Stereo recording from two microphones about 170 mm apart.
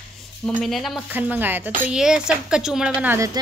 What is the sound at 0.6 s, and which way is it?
Speech, centre (ahead or behind).